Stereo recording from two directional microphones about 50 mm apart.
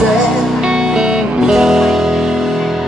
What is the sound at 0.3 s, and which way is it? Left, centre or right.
Music, centre.